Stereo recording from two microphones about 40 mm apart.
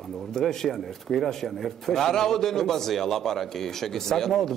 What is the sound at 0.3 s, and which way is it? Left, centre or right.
Speech, centre.